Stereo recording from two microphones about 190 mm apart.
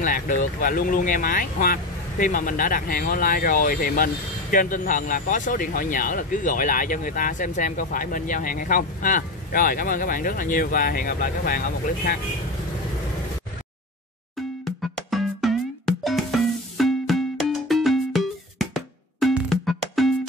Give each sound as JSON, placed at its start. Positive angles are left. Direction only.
{"t": 0.0, "sound": "speech", "side_deg": 45}
{"t": 14.6, "sound": "music", "side_deg": 0}